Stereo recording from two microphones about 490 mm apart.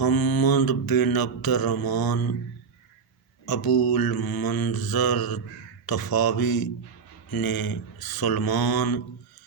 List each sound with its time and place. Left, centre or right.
0.0 s mantra: left
3.4 s mantra: left